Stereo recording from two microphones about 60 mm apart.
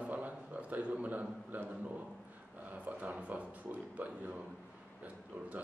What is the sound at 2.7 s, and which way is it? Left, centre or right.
A man's voice, right.